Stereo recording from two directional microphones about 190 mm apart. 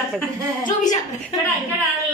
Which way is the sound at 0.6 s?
40° left (ahead or behind).